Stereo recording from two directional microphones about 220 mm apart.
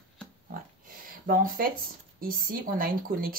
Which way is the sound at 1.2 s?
40° right (ahead or behind).